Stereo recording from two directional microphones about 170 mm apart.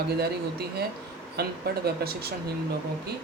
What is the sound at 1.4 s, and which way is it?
Speech, 70° right (ahead or behind).